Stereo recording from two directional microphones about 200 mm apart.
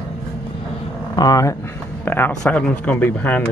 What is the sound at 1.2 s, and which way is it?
Speech, 15° left (ahead or behind).